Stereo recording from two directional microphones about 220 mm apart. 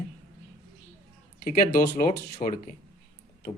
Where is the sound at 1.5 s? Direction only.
40° left (ahead or behind).